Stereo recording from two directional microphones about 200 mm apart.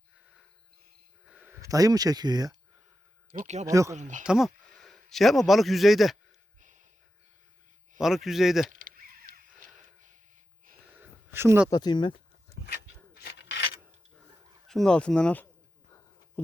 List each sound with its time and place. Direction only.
1.2 s a sound: 5° right (ahead or behind)
3.3 s speech: 35° right (ahead or behind)
3.7 s speech: 15° right (ahead or behind)
3.9 s speech: 35° right (ahead or behind)
4.2 s a man's voice: 5° right (ahead or behind)
7.9 s speech: centre (ahead or behind)
8.7 s chop: 45° right (ahead or behind)
11.3 s speech: 10° right (ahead or behind)
11.7 s speech: 20° left (ahead or behind)
13.2 s rub: 60° left (ahead or behind)
14.7 s speech: 5° left (ahead or behind)